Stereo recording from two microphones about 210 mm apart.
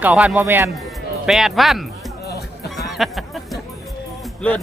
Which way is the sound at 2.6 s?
Centre (ahead or behind).